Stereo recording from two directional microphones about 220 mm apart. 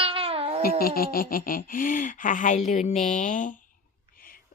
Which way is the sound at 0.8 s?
40° left (ahead or behind).